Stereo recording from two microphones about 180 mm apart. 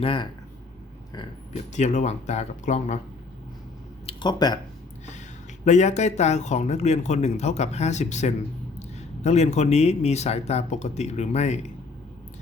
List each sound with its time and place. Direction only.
0.0 s speech: 30° left (ahead or behind)
1.7 s a man's voice: 40° left (ahead or behind)
4.0 s speech: 25° left (ahead or behind)
5.6 s a man's voice: 40° left (ahead or behind)